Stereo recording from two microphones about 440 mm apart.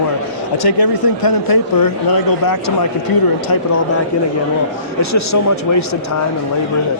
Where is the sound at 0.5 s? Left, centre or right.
Left.